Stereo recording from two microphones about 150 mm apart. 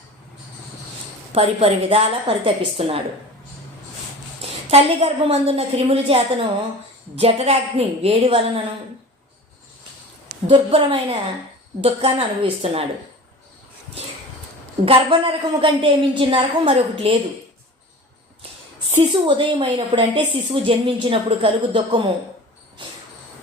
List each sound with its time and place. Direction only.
1.3 s a woman's voice: 40° right (ahead or behind)
4.7 s a woman's voice: 40° right (ahead or behind)
10.4 s a woman's voice: 40° right (ahead or behind)
14.8 s a woman's voice: 40° right (ahead or behind)
18.9 s a woman's voice: 35° right (ahead or behind)